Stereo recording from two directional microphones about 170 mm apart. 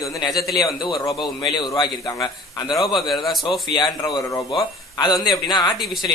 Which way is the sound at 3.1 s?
Centre (ahead or behind).